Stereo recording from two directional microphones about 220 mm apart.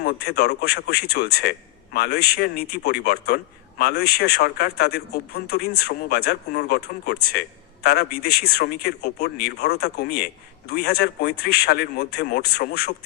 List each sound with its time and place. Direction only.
0.0 s speech: 45° left (ahead or behind)